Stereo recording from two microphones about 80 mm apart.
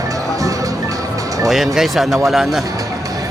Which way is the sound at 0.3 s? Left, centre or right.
Right.